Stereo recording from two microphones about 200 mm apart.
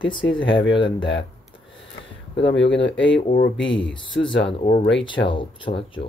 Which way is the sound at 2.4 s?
65° left (ahead or behind).